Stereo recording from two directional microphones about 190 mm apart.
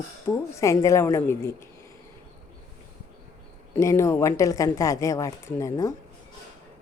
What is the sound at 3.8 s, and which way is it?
Speech, 15° left (ahead or behind).